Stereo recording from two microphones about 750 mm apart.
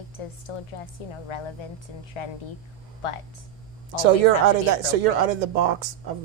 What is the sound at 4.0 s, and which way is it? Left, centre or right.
Speech, right.